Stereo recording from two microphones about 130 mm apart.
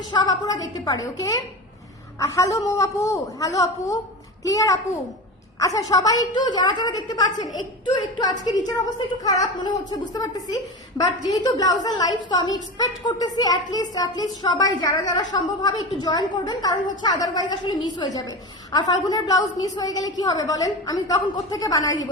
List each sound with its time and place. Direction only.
0.1 s a woman's voice: 35° left (ahead or behind)